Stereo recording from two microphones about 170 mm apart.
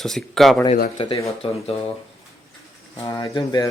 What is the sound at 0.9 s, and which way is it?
Speech, 30° left (ahead or behind).